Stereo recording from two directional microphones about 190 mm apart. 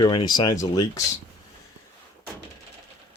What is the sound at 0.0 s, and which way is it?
Speech, 25° left (ahead or behind).